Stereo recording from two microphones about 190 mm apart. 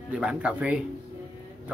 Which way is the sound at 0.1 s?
5° right (ahead or behind).